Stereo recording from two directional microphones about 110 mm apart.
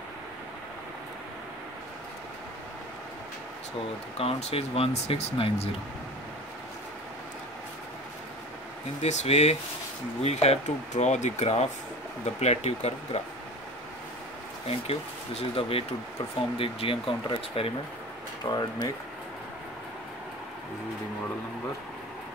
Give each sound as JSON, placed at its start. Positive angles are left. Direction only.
{"t": 4.2, "sound": "speech", "side_deg": 65}
{"t": 9.0, "sound": "speech", "side_deg": 90}
{"t": 10.2, "sound": "speech", "side_deg": 75}
{"t": 14.7, "sound": "speech", "side_deg": 65}
{"t": 18.4, "sound": "speech", "side_deg": 40}